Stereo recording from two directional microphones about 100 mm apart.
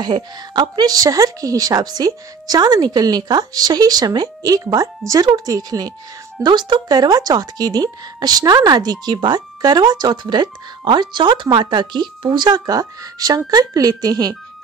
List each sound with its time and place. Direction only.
0.0 s a woman's voice: 45° right (ahead or behind)